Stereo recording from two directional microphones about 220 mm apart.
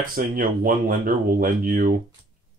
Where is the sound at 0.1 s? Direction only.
40° right (ahead or behind).